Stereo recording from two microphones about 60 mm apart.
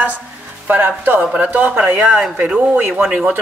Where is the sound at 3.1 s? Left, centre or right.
Right.